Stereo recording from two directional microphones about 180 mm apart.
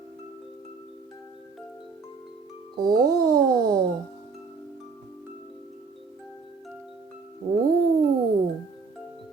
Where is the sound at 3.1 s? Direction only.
20° right (ahead or behind).